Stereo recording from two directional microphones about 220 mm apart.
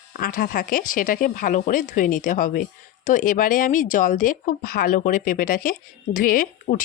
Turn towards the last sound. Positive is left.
turn(degrees=40)  # may be behind; listen again after turning